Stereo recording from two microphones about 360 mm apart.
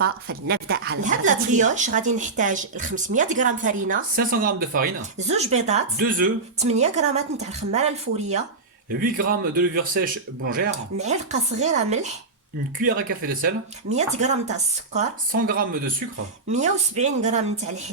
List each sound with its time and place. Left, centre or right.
0.0 s speech: right